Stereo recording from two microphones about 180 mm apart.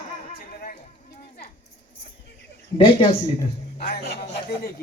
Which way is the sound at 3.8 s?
60° left (ahead or behind).